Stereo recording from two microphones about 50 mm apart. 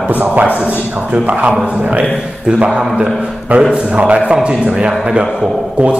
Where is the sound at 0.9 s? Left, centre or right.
Right.